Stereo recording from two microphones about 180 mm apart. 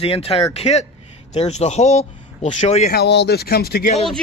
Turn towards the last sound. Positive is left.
turn(degrees=60)  # may be behind; listen again after turning